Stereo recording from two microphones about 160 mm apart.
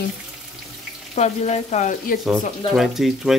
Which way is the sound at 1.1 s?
45° left (ahead or behind).